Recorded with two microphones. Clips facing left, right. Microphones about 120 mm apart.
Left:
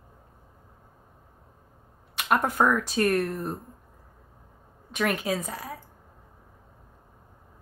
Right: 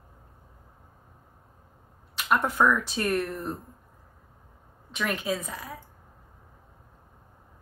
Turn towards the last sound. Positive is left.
turn(degrees=40)  # may be behind; listen again after turning